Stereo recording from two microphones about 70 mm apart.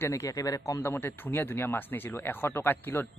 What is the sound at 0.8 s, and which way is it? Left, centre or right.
Speech, left.